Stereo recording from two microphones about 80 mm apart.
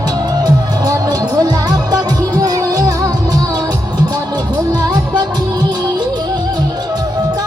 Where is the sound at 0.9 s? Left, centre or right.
Right.